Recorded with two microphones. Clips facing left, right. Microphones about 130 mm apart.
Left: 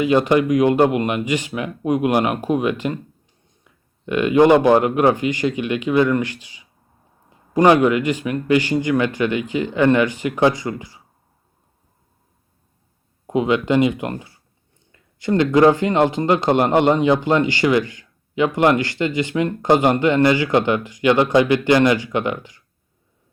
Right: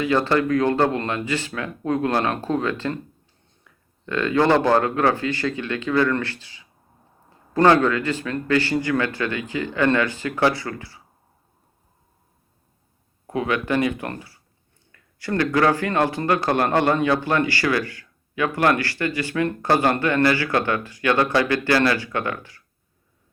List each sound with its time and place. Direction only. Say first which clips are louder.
0.0 s a man's voice: left 4 dB; 15° left (ahead or behind)
13.2 s speech: left 5 dB; 20° left (ahead or behind)